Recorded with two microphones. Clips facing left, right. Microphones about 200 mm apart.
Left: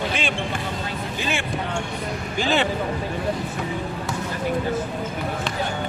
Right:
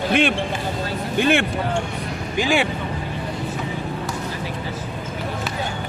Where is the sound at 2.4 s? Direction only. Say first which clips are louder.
Right 2 dB; 10° right (ahead or behind).